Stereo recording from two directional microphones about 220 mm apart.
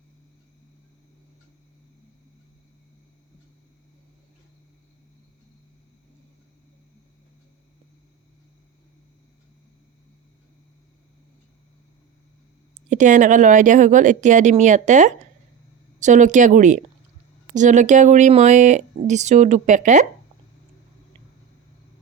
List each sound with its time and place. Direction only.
12.7 s speech: 35° right (ahead or behind)